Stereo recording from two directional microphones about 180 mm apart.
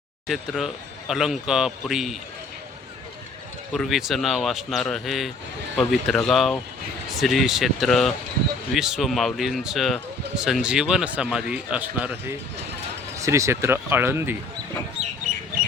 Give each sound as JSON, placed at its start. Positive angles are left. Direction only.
{"t": 0.3, "sound": "speech", "side_deg": 0}
{"t": 3.7, "sound": "speech", "side_deg": 0}
{"t": 13.1, "sound": "speech", "side_deg": -15}